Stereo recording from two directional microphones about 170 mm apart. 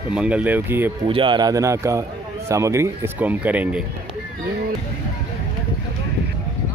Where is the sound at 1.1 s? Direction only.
30° right (ahead or behind); by 3.9 s 10° right (ahead or behind).